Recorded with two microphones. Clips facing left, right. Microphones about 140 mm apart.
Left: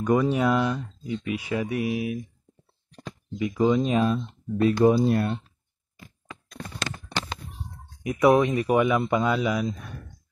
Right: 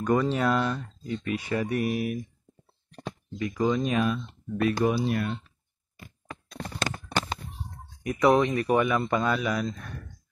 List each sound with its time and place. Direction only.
0.0 s speech: 10° left (ahead or behind)
3.3 s speech: 15° left (ahead or behind); by 5.4 s 35° left (ahead or behind)
6.8 s clip-clop: 50° right (ahead or behind)
8.2 s speech: 10° left (ahead or behind)